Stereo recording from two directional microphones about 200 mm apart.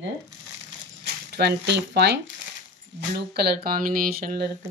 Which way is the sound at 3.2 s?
55° right (ahead or behind).